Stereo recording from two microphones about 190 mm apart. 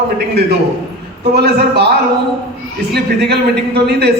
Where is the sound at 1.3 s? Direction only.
60° right (ahead or behind).